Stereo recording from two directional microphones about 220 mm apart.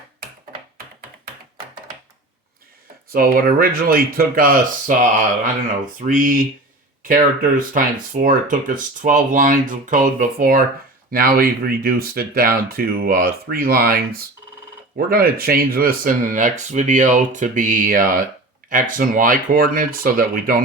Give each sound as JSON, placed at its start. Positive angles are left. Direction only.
{"t": 3.1, "sound": "speech", "side_deg": -40}
{"t": 6.1, "sound": "speech", "side_deg": -40}